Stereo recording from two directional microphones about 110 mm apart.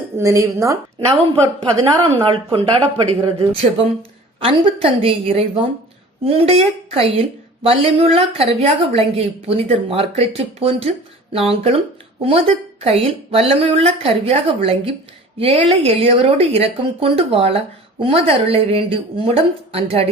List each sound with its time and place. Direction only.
0.2 s a woman's voice: 30° right (ahead or behind)
2.2 s a woman's voice: 50° right (ahead or behind)